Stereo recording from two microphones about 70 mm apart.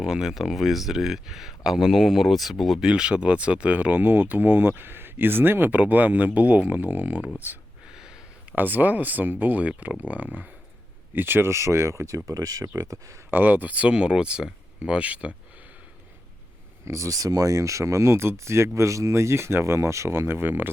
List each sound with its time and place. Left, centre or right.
0.0 s speech: centre; by 7.6 s right
7.9 s a sound: centre
8.5 s speech: right
13.3 s speech: right
16.8 s speech: right